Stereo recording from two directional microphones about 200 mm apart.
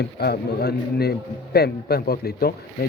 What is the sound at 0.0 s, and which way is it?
Speech, 55° left (ahead or behind).